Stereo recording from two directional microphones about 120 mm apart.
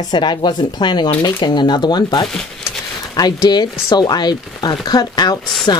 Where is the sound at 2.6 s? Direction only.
35° left (ahead or behind).